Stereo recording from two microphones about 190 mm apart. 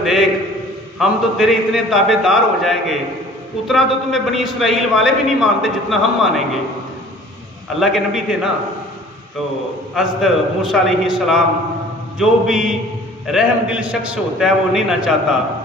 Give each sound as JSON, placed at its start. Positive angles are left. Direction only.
{"t": 0.0, "sound": "a sound", "side_deg": 0}
{"t": 0.9, "sound": "a man's voice", "side_deg": 0}
{"t": 7.8, "sound": "a man's voice", "side_deg": 0}
{"t": 9.9, "sound": "a man's voice", "side_deg": 0}